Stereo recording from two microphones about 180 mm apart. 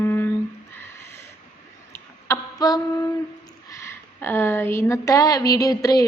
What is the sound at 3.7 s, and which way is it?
A woman's voice, 15° left (ahead or behind).